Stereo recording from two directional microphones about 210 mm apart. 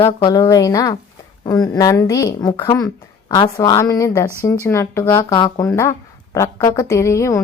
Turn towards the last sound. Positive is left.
turn(degrees=15)  # may be behind; listen again after turning